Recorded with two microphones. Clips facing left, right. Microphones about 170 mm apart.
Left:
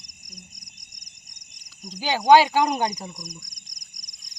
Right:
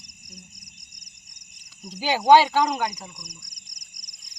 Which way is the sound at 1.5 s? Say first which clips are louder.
Even; 5° right (ahead or behind).